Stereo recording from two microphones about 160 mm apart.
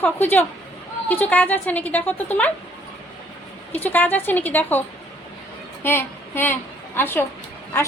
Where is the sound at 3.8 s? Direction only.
10° left (ahead or behind).